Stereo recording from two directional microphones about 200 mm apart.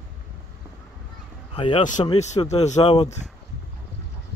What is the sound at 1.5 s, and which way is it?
A man's voice, 25° left (ahead or behind).